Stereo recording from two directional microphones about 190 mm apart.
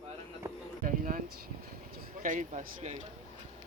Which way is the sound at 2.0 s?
45° right (ahead or behind).